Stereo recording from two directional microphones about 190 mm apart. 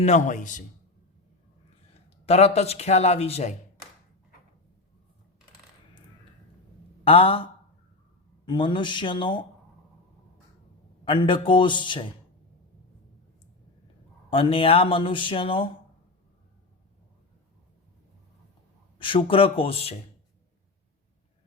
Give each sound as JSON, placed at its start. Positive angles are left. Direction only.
{"t": 0.0, "sound": "a man's voice", "side_deg": 40}
{"t": 1.9, "sound": "speech", "side_deg": 35}
{"t": 7.0, "sound": "speech", "side_deg": 30}
{"t": 8.4, "sound": "speech", "side_deg": 25}
{"t": 11.0, "sound": "speech", "side_deg": 25}
{"t": 14.3, "sound": "speech", "side_deg": 30}
{"t": 18.9, "sound": "speech", "side_deg": 25}